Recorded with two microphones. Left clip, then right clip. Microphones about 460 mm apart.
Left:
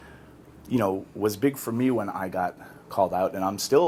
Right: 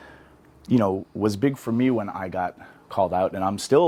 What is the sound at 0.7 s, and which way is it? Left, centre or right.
Speech, right.